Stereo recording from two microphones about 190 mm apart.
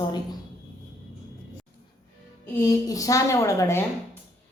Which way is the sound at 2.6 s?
20° left (ahead or behind).